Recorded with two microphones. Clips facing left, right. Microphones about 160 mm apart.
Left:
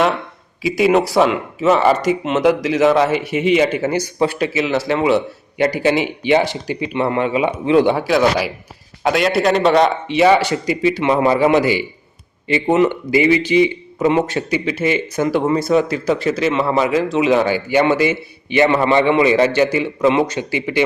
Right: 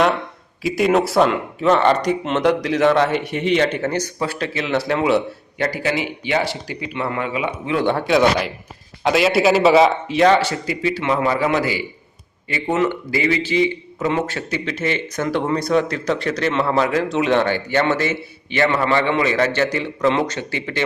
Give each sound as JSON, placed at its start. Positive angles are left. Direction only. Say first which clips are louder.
{"t": 0.6, "sound": "speech", "louder": "left 2 dB", "side_deg": 0}
{"t": 5.5, "sound": "speech", "louder": "left 6 dB", "side_deg": 20}
{"t": 7.9, "sound": "a man's voice", "louder": "left 1 dB", "side_deg": 5}